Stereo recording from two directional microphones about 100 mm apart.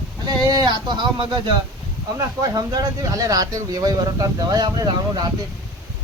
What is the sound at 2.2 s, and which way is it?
Speech, 40° right (ahead or behind).